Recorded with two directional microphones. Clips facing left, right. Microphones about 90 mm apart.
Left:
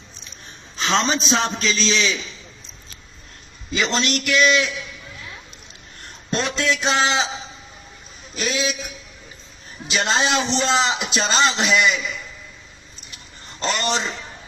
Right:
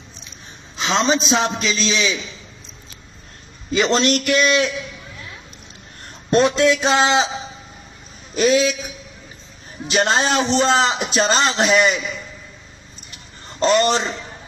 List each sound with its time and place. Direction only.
0.8 s a man's voice: centre (ahead or behind)
3.7 s a man's voice: 40° right (ahead or behind)
6.3 s a man's voice: 40° right (ahead or behind)
8.4 s a man's voice: 45° right (ahead or behind)
9.8 s a man's voice: 45° right (ahead or behind)
13.6 s a man's voice: 40° right (ahead or behind)